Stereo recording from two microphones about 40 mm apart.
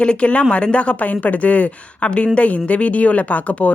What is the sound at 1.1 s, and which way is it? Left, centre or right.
Speech, left.